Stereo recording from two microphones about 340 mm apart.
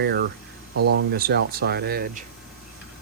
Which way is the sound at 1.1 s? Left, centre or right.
Right.